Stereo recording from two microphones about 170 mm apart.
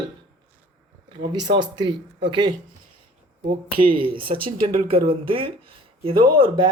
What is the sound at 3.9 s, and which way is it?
Speech, 30° right (ahead or behind).